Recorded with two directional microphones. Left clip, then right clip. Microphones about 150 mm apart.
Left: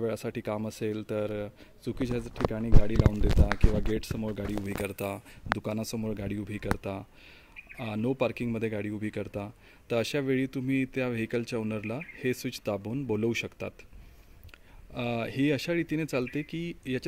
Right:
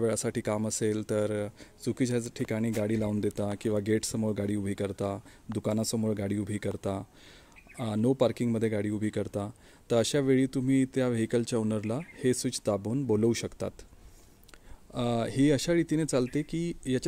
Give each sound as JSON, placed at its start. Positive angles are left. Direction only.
{"t": 0.0, "sound": "speech", "side_deg": -45}
{"t": 14.9, "sound": "speech", "side_deg": -35}